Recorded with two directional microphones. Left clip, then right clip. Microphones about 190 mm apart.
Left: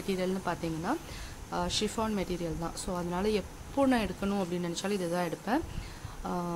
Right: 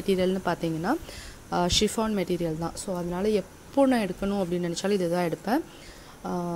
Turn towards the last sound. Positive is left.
turn(degrees=-15)  # may be behind; listen again after turning